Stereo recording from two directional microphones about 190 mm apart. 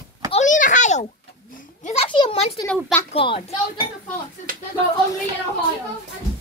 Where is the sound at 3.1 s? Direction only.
30° left (ahead or behind).